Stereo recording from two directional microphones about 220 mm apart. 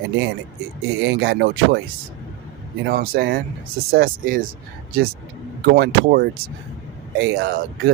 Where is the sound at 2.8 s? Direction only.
45° right (ahead or behind).